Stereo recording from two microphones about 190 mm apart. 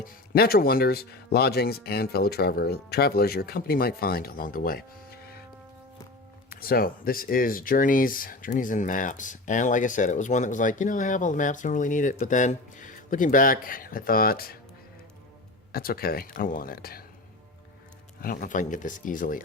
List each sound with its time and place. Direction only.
0.0 s speech: 55° left (ahead or behind)
6.5 s speech: 50° left (ahead or behind)
15.7 s speech: 50° left (ahead or behind)
18.2 s speech: 45° left (ahead or behind)